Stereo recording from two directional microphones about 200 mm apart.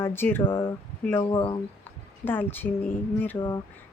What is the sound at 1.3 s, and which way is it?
Speech, 25° left (ahead or behind).